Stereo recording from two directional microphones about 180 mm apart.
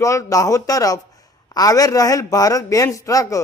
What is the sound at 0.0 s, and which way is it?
Speech, 15° left (ahead or behind).